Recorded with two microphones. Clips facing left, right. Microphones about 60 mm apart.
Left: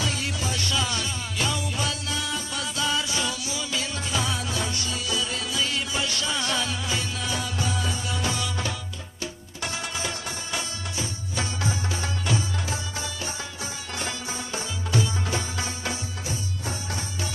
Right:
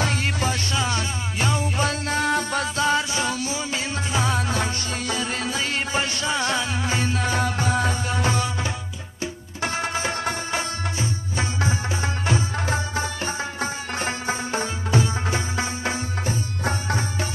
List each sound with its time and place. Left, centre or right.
0.0 s music: right